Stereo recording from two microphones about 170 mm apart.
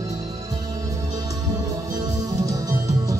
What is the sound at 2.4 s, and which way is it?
Music, 20° right (ahead or behind).